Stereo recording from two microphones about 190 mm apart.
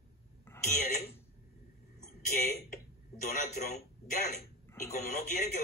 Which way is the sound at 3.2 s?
40° left (ahead or behind).